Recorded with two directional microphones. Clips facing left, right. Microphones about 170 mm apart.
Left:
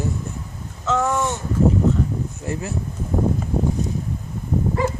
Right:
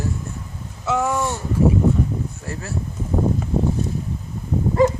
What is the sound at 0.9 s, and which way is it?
Speech, 15° right (ahead or behind).